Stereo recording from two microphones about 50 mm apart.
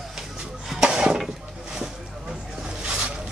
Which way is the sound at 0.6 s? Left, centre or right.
Centre.